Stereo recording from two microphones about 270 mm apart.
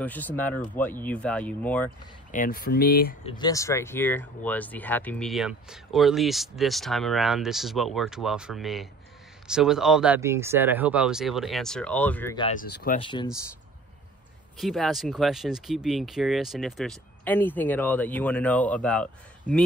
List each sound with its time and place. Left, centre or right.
0.0 s speech: centre
2.3 s speech: left
3.3 s speech: centre
12.4 s speech: left
12.6 s speech: left
13.0 s speech: centre
14.6 s speech: centre
19.5 s speech: right